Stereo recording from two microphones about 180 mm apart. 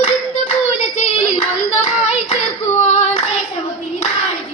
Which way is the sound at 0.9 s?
35° left (ahead or behind).